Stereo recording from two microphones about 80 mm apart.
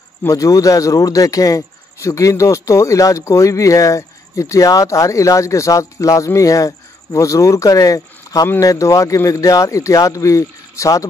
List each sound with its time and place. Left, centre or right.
0.3 s speech: left